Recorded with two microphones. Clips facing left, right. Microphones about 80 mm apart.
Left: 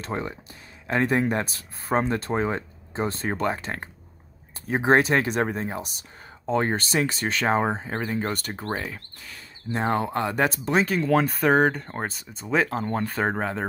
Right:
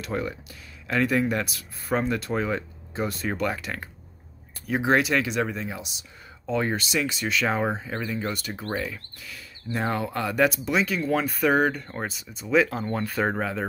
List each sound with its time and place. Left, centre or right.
0.0 s speech: left